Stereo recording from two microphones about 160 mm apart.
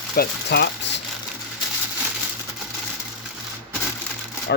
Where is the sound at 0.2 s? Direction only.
90° left.